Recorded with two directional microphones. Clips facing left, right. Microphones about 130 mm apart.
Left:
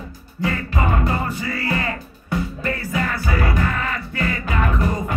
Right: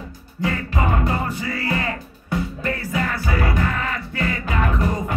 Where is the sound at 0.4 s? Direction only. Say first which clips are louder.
Even; 20° right (ahead or behind).